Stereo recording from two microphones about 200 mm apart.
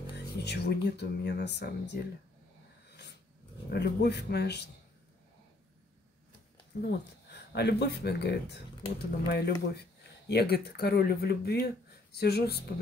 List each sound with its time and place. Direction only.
0.4 s speech: 55° left (ahead or behind)
3.7 s speech: 55° left (ahead or behind)
6.7 s speech: 55° left (ahead or behind)